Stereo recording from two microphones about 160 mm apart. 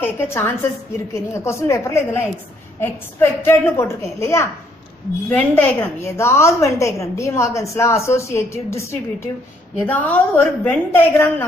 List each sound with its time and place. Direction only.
0.0 s a woman's voice: 15° left (ahead or behind)